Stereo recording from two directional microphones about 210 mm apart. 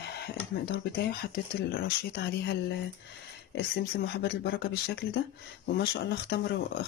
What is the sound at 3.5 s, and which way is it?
Speech, 50° left (ahead or behind).